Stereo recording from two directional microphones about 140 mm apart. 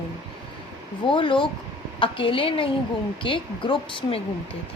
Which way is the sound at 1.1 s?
35° left (ahead or behind).